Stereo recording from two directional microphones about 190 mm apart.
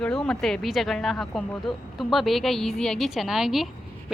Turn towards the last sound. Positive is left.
turn(degrees=0)  # may be behind; listen again after turning